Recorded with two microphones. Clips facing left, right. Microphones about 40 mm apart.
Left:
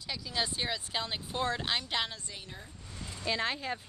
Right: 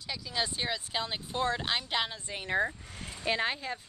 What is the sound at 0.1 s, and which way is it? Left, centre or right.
Speech, centre.